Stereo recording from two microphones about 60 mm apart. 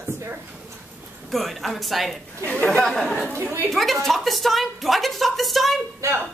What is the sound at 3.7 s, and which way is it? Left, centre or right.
A woman's voice, centre.